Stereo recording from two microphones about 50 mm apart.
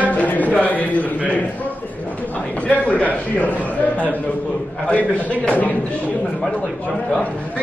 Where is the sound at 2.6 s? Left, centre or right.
Left.